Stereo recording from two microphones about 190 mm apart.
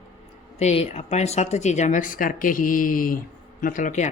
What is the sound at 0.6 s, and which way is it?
A woman's voice, 35° left (ahead or behind).